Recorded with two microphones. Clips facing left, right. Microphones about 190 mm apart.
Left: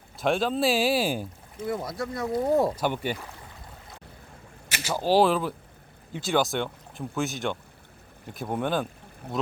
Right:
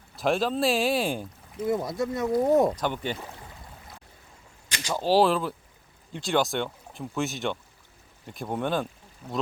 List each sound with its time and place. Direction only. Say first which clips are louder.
0.2 s speech: even; centre (ahead or behind)
1.6 s speech: right 4 dB; 20° right (ahead or behind)
2.7 s speech: left 2 dB; 10° left (ahead or behind)
4.9 s speech: even; centre (ahead or behind)
9.2 s speech: left 1 dB; 60° left (ahead or behind)